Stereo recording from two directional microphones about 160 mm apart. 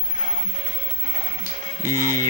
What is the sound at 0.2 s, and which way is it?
Music, 50° right (ahead or behind).